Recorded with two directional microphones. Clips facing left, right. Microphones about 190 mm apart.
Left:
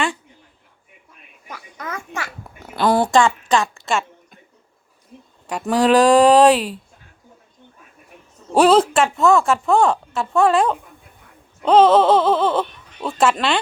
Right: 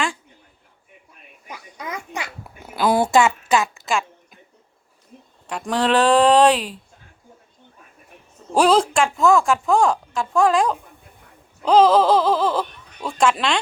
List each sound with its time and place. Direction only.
1.5 s babbling: 15° right (ahead or behind)
2.6 s a sound: 5° right (ahead or behind)
5.5 s speech: 10° left (ahead or behind)
8.5 s speech: 5° left (ahead or behind)